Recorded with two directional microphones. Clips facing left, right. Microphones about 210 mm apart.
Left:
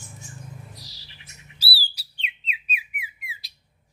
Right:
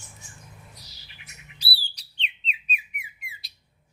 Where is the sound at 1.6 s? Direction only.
5° left (ahead or behind).